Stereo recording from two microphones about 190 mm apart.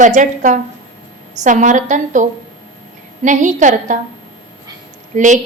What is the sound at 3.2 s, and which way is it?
Speech, 40° right (ahead or behind).